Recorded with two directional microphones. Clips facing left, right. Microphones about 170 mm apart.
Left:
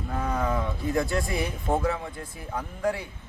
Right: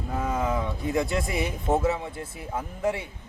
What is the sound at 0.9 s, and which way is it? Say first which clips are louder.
Speech: even; 20° right (ahead or behind).